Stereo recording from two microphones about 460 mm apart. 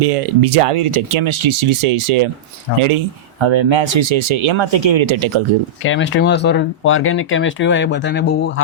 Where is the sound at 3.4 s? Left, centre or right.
Right.